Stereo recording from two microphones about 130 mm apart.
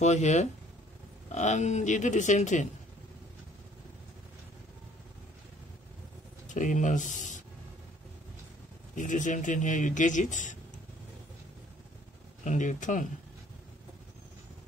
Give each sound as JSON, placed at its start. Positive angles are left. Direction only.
{"t": 0.0, "sound": "a man's voice", "side_deg": 65}
{"t": 6.5, "sound": "speech", "side_deg": 75}
{"t": 8.9, "sound": "a man's voice", "side_deg": 75}
{"t": 12.4, "sound": "a man's voice", "side_deg": 75}